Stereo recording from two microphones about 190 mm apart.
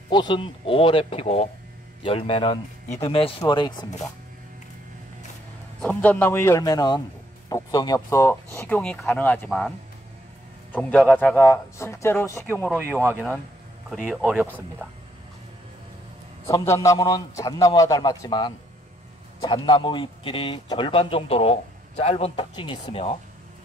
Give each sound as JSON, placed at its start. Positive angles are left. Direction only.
{"t": 0.1, "sound": "speech", "side_deg": 25}
{"t": 5.8, "sound": "speech", "side_deg": 5}
{"t": 13.8, "sound": "speech", "side_deg": 0}
{"t": 16.4, "sound": "speech", "side_deg": 15}